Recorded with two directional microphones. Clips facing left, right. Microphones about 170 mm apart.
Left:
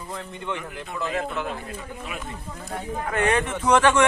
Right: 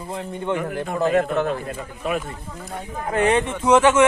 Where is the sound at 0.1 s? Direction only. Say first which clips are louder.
Right 7 dB; 40° right (ahead or behind).